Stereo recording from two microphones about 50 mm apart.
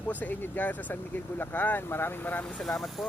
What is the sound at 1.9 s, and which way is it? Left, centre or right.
Speech, left.